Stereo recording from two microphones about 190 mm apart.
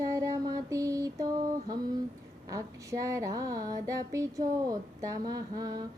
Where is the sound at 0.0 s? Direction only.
15° right (ahead or behind).